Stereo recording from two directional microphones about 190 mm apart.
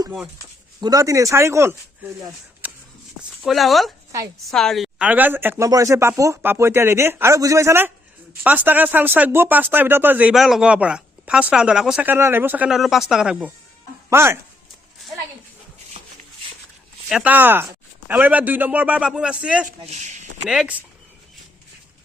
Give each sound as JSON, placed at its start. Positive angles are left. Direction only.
{"t": 0.8, "sound": "speech", "side_deg": -20}
{"t": 2.6, "sound": "a sound", "side_deg": -10}
{"t": 3.4, "sound": "speech", "side_deg": 0}
{"t": 17.1, "sound": "speech", "side_deg": -5}
{"t": 19.8, "sound": "speech", "side_deg": -35}
{"t": 20.4, "sound": "speech", "side_deg": -5}